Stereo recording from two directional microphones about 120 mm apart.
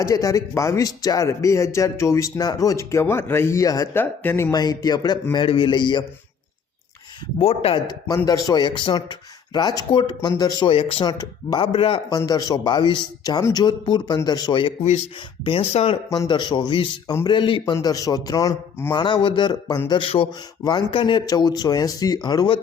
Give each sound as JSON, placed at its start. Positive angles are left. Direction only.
{"t": 0.0, "sound": "speech", "side_deg": 30}
{"t": 3.9, "sound": "speech", "side_deg": 15}
{"t": 4.5, "sound": "speech", "side_deg": 35}
{"t": 7.3, "sound": "speech", "side_deg": 50}
{"t": 7.9, "sound": "speech", "side_deg": 30}
{"t": 10.6, "sound": "speech", "side_deg": 50}
{"t": 11.0, "sound": "speech", "side_deg": 35}
{"t": 11.6, "sound": "speech", "side_deg": 45}
{"t": 12.1, "sound": "speech", "side_deg": 30}
{"t": 15.4, "sound": "speech", "side_deg": 50}
{"t": 16.0, "sound": "speech", "side_deg": 25}
{"t": 16.3, "sound": "speech", "side_deg": 40}
{"t": 17.7, "sound": "speech", "side_deg": 30}
{"t": 18.9, "sound": "speech", "side_deg": 40}